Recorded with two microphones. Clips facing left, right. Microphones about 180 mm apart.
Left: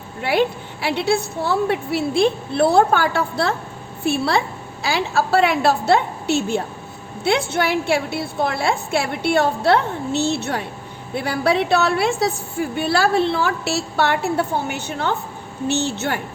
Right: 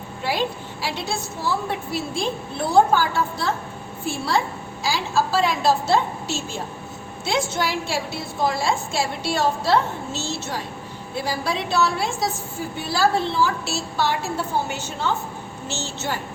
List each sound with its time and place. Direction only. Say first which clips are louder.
0.2 s a woman's voice: left 6 dB; 65° left (ahead or behind)